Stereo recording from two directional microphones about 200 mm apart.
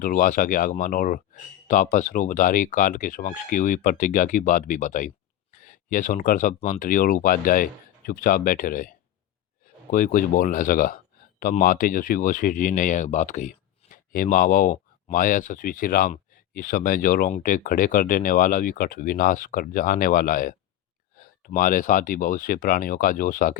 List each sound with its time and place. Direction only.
0.0 s speech: 40° left (ahead or behind)